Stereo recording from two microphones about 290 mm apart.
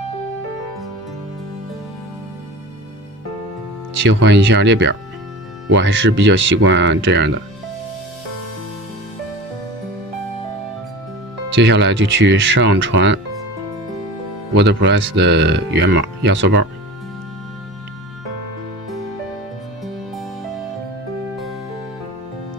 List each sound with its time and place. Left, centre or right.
4.0 s speech: right
11.5 s speech: right
14.5 s speech: right